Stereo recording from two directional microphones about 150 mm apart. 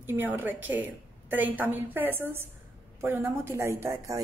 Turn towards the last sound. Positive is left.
turn(degrees=-20)  # may be behind; listen again after turning